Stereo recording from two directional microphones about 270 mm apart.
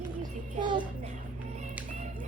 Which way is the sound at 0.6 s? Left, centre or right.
Centre.